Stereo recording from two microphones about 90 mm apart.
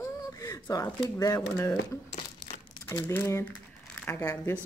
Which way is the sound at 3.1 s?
30° left (ahead or behind).